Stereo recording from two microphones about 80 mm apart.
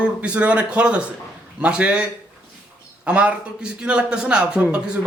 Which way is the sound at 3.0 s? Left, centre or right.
Centre.